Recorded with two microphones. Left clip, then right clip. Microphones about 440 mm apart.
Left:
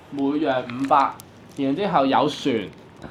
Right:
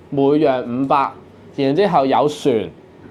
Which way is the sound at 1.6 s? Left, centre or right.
Right.